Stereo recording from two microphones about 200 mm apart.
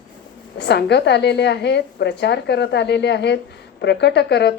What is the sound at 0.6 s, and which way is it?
A woman's voice, 55° left (ahead or behind).